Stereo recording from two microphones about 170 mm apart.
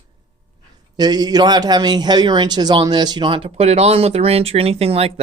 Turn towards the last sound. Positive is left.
turn(degrees=-35)  # may be behind; listen again after turning